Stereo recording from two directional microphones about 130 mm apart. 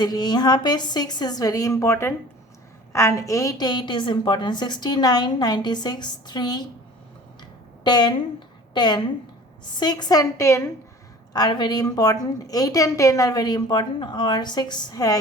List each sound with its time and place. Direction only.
0.0 s a woman's voice: 35° left (ahead or behind)
7.9 s a woman's voice: 35° left (ahead or behind)
11.3 s a woman's voice: 35° left (ahead or behind)